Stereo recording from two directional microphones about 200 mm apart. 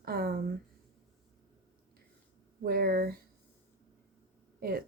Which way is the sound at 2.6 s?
50° right (ahead or behind).